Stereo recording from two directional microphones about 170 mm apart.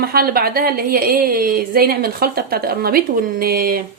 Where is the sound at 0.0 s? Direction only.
65° right (ahead or behind).